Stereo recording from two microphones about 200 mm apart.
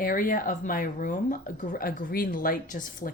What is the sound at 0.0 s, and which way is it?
Speech, 45° left (ahead or behind).